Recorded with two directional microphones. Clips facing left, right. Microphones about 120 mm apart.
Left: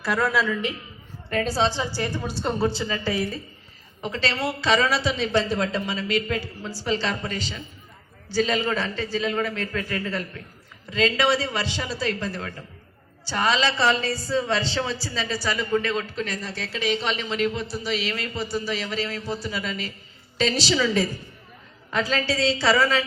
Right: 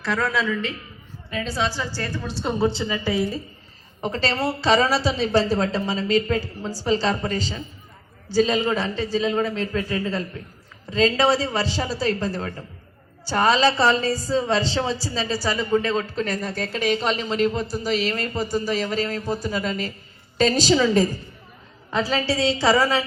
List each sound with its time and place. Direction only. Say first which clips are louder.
0.0 s a man's voice: even; 10° left (ahead or behind)
1.3 s a woman's voice: left 4 dB; 50° left (ahead or behind)
1.5 s a woman's voice: right 1 dB; 25° left (ahead or behind)
2.3 s a man's voice: right 1 dB; centre (ahead or behind)
2.6 s a man's voice: right 5 dB; 20° right (ahead or behind)
4.0 s a woman's voice: right 3 dB; 40° right (ahead or behind)
8.3 s a man's voice: right 3 dB; 25° right (ahead or behind); by 21.1 s 40° right (ahead or behind)
21.8 s a woman's voice: right 2 dB; 25° right (ahead or behind)